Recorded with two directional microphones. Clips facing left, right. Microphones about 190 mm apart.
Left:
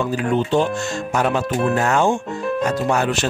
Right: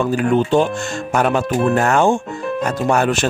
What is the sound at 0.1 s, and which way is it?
Speech, 55° right (ahead or behind).